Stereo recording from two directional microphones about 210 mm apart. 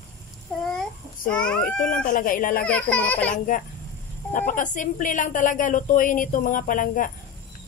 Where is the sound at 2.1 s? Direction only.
40° left (ahead or behind).